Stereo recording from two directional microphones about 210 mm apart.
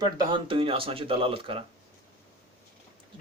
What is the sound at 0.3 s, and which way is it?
Speech, 25° right (ahead or behind).